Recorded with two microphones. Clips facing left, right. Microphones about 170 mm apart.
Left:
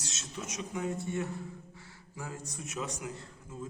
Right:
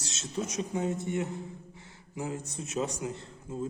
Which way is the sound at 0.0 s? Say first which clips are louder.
Right 7 dB; 30° right (ahead or behind).